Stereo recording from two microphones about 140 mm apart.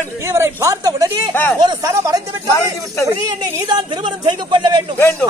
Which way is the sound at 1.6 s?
30° right (ahead or behind).